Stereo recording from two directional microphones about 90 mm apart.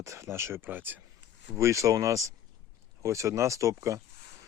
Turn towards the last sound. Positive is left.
turn(degrees=-35)  # may be behind; listen again after turning